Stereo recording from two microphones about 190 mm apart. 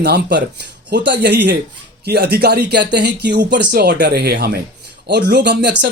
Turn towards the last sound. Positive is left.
turn(degrees=-60)  # may be behind; listen again after turning